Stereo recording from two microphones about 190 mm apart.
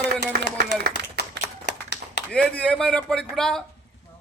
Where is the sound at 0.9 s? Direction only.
55° right (ahead or behind).